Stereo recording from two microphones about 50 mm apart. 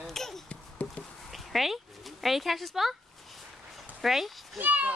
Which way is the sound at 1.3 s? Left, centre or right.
Centre.